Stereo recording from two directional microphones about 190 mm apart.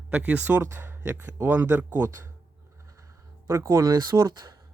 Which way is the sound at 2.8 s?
15° right (ahead or behind).